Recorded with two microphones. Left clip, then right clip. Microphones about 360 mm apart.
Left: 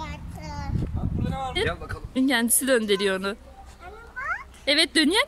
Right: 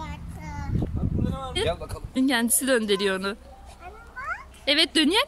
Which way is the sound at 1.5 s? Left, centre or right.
Centre.